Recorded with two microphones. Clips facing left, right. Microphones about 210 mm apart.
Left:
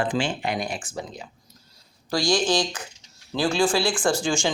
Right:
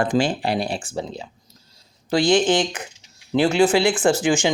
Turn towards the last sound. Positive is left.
turn(degrees=-20)  # may be behind; listen again after turning